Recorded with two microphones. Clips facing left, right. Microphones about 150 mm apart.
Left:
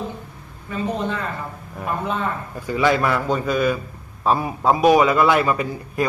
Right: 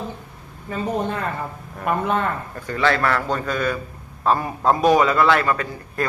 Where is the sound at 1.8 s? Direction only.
60° right (ahead or behind).